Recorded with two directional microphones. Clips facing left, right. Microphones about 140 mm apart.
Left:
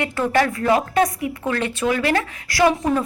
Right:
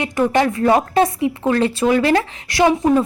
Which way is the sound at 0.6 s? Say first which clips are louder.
Right 3 dB; 30° right (ahead or behind).